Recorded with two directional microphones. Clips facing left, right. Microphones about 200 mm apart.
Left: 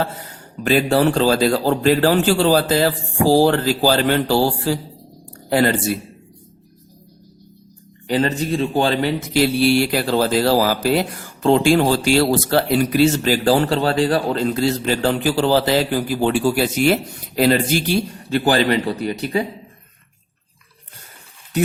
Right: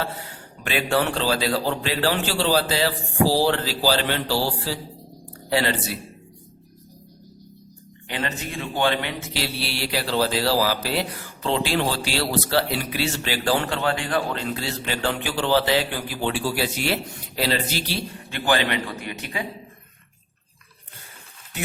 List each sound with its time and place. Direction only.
0.6 s a man's voice: 40° left (ahead or behind)
8.0 s a man's voice: 35° left (ahead or behind)